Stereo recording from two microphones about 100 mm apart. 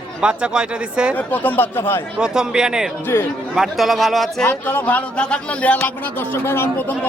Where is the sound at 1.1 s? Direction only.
20° left (ahead or behind).